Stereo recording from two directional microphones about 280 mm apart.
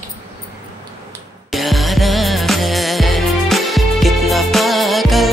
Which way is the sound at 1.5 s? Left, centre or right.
Centre.